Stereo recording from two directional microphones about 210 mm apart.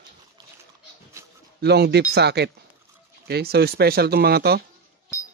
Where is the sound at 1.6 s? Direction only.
50° right (ahead or behind).